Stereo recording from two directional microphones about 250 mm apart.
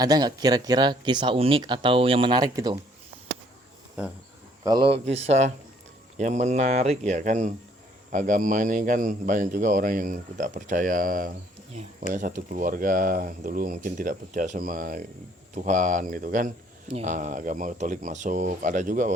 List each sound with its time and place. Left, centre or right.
0.0 s speech: centre
4.9 s a man's voice: right